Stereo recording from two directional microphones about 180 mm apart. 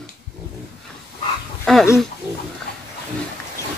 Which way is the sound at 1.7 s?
5° left (ahead or behind).